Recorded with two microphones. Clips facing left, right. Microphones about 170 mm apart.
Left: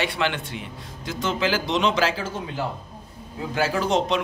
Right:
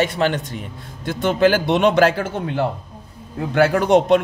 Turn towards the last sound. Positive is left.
turn(degrees=-55)  # may be behind; listen again after turning